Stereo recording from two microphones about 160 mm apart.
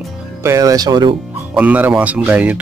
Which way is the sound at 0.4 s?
20° right (ahead or behind).